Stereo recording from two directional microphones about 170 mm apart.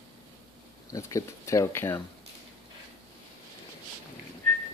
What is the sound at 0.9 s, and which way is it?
Speech, 20° left (ahead or behind).